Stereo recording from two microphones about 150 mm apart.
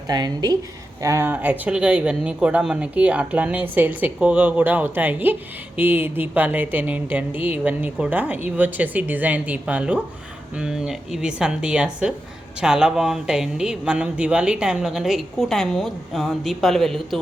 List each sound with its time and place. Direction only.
0.1 s a woman's voice: 25° right (ahead or behind); by 17.2 s centre (ahead or behind)